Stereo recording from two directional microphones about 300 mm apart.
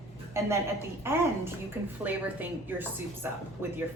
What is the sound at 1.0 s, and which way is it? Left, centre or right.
A woman's voice, centre.